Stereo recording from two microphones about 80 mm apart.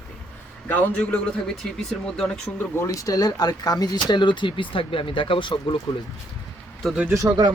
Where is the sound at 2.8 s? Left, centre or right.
Left.